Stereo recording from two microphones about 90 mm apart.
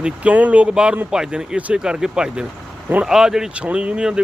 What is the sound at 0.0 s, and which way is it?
Speech, 15° right (ahead or behind).